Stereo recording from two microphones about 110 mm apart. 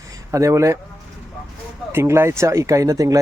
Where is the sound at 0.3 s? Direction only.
30° right (ahead or behind).